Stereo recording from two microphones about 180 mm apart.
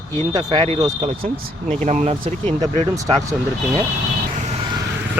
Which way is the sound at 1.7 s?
40° right (ahead or behind).